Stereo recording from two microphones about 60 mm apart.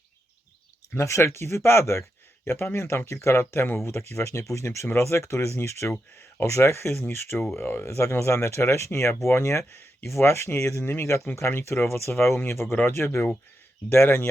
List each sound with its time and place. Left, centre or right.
0.9 s speech: left
3.1 s speech: left
6.9 s speech: left
12.7 s speech: left
13.9 s speech: left